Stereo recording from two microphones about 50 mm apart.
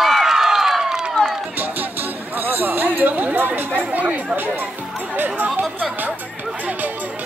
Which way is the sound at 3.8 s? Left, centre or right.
Right.